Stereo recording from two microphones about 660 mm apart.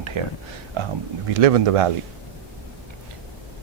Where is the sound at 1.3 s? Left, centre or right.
Right.